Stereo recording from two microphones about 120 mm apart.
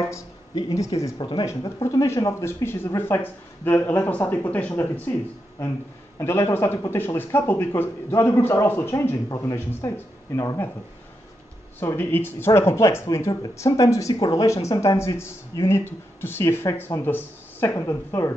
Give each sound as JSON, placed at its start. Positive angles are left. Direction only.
{"t": 0.0, "sound": "a sound", "side_deg": 30}
{"t": 0.7, "sound": "speech", "side_deg": 30}
{"t": 6.1, "sound": "speech", "side_deg": 20}
{"t": 11.8, "sound": "speech", "side_deg": 20}